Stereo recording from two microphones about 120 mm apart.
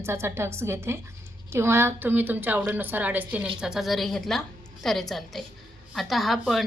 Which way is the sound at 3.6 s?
5° right (ahead or behind).